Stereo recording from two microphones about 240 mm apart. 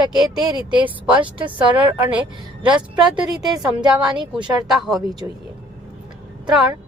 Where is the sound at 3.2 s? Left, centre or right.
Centre.